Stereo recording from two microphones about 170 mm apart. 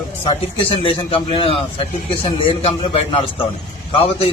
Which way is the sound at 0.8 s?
30° left (ahead or behind).